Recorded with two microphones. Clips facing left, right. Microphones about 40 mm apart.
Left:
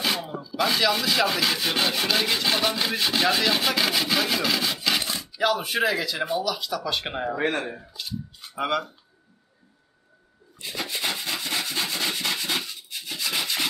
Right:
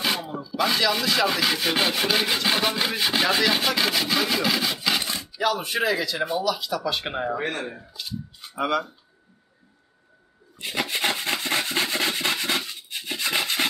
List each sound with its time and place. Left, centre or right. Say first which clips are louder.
0.0 s speech: right 1 dB; centre
7.4 s speech: left 3 dB; left
8.5 s speech: right 1 dB; centre
10.6 s rub: right 4 dB; right